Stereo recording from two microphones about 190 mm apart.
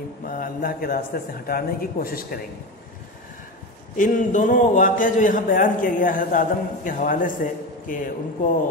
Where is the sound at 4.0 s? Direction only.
40° left (ahead or behind).